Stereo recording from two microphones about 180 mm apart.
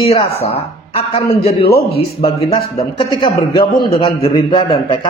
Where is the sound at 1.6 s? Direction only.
60° left (ahead or behind).